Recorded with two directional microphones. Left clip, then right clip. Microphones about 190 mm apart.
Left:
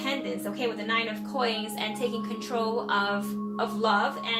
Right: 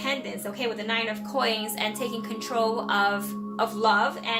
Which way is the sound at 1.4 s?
40° right (ahead or behind).